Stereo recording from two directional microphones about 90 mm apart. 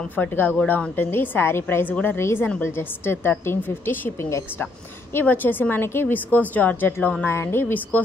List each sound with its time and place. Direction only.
0.1 s a woman's voice: 20° left (ahead or behind)